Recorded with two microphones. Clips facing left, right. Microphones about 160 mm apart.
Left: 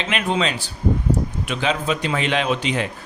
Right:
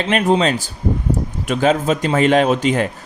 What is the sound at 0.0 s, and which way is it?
A man's voice, 40° right (ahead or behind).